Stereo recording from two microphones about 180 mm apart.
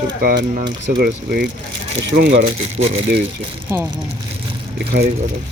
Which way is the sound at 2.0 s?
80° right.